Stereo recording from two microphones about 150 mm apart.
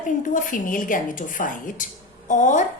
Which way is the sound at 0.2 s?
60° left (ahead or behind).